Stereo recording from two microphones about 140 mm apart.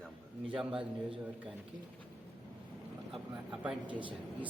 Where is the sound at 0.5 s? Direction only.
5° right (ahead or behind).